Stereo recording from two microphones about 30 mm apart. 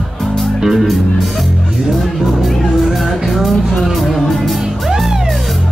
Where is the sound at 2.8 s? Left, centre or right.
Centre.